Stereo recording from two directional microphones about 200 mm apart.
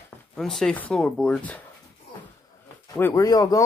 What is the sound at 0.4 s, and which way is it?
Speech, centre (ahead or behind).